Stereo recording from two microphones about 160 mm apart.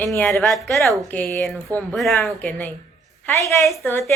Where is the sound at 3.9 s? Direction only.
15° left (ahead or behind).